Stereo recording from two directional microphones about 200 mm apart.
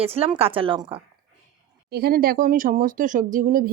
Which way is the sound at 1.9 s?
50° right (ahead or behind).